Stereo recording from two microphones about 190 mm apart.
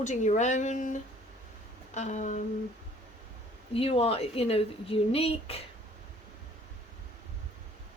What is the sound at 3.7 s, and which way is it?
Speech, 30° left (ahead or behind).